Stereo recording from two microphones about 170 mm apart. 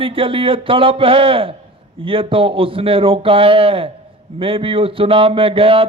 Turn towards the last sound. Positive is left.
turn(degrees=-30)  # may be behind; listen again after turning